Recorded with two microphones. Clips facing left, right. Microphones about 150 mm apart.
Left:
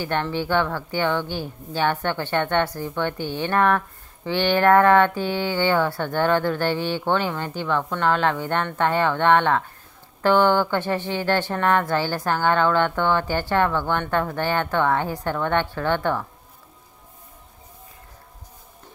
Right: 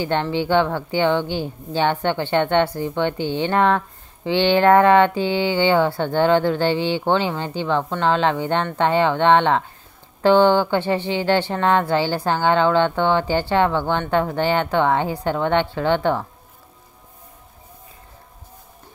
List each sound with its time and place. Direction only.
0.0 s a woman's voice: 20° right (ahead or behind)